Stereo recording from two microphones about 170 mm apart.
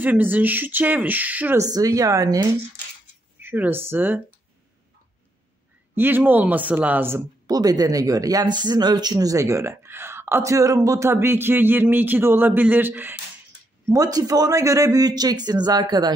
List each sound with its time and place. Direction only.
0.0 s speech: 10° right (ahead or behind)
1.7 s a man's voice: 20° right (ahead or behind)
3.3 s speech: 10° right (ahead or behind)
5.9 s a man's voice: 10° right (ahead or behind)